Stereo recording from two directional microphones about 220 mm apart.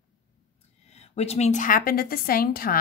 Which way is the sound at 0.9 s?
30° left (ahead or behind).